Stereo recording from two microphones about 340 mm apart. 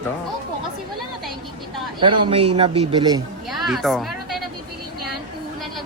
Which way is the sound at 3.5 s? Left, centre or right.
Centre.